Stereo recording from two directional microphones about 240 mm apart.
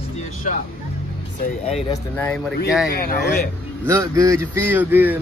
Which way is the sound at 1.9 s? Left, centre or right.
Centre.